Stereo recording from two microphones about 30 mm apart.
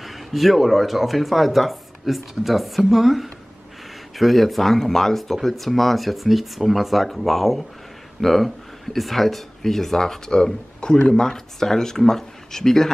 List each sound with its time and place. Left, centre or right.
0.0 s speech: centre